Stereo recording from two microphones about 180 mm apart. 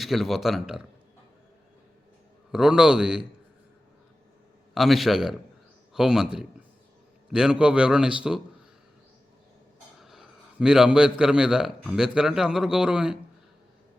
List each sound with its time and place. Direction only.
0.0 s a man's voice: centre (ahead or behind)
2.5 s a man's voice: 5° right (ahead or behind)
4.7 s a man's voice: centre (ahead or behind)
10.0 s a man's voice: centre (ahead or behind)